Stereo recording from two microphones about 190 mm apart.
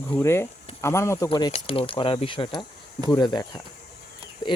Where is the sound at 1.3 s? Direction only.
30° left (ahead or behind).